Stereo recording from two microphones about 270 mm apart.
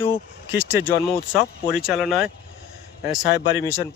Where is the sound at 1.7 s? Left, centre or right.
Centre.